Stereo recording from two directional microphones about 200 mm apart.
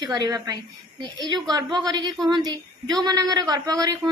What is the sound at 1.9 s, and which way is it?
Child singing, 20° right (ahead or behind).